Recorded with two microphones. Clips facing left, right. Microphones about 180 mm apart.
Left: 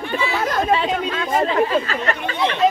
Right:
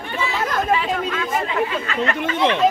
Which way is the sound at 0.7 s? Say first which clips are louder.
Left 1 dB; 30° left (ahead or behind).